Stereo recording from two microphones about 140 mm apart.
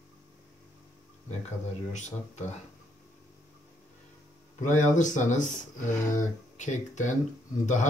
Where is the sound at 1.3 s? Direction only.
55° left (ahead or behind).